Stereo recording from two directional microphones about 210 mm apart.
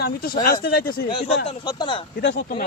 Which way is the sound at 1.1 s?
25° left (ahead or behind).